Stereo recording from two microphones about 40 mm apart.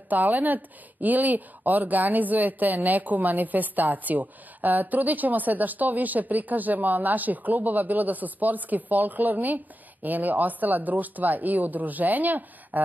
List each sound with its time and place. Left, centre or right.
0.1 s speech: right